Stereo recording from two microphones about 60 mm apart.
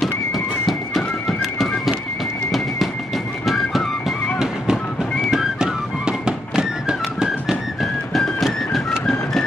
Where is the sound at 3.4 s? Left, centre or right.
Centre.